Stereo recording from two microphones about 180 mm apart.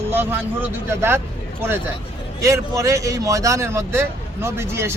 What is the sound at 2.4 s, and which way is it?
Speech, 15° right (ahead or behind).